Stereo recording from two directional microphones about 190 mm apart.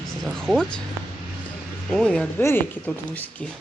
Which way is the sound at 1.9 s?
5° left (ahead or behind).